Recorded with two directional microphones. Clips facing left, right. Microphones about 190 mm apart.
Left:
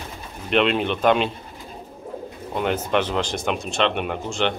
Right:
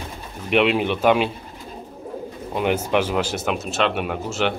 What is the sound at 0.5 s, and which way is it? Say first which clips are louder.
Speech: right 1 dB; 10° right (ahead or behind).